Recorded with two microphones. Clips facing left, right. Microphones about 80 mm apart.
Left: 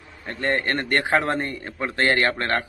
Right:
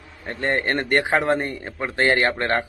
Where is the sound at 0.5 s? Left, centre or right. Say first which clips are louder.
Right 1 dB; right.